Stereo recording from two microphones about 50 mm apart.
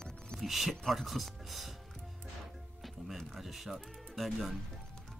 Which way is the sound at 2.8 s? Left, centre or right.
Centre.